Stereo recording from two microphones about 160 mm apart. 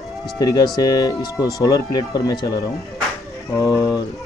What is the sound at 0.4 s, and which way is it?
A man's voice, 25° left (ahead or behind).